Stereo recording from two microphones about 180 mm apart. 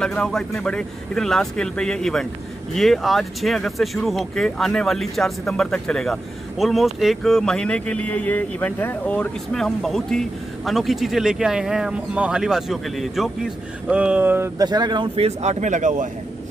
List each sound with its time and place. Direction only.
0.0 s speech: 5° left (ahead or behind); by 14.5 s 10° right (ahead or behind)
14.6 s a man's voice: 25° right (ahead or behind); by 16.1 s 45° right (ahead or behind)